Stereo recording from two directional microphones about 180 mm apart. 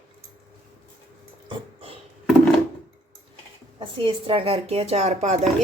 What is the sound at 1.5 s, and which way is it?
Dog, 30° right (ahead or behind).